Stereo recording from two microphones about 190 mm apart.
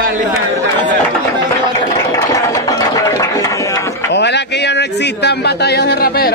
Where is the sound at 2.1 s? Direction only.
15° left (ahead or behind).